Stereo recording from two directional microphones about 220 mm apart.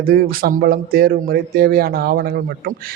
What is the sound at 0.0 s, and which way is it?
Speech, 40° right (ahead or behind).